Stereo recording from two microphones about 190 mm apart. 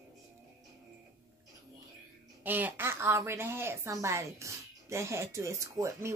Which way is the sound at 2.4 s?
10° right (ahead or behind).